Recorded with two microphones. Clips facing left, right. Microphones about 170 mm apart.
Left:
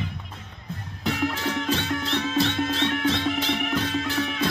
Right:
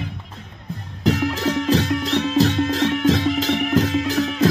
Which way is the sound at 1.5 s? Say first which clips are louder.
Right 11 dB; 85° right.